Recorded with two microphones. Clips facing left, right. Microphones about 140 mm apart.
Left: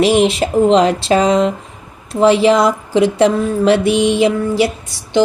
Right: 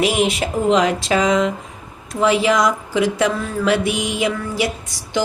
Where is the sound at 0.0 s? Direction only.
30° left (ahead or behind).